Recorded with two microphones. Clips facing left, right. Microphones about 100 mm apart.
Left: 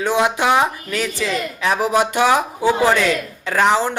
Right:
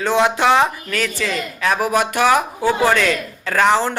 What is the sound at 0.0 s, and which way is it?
Speech, 15° left (ahead or behind).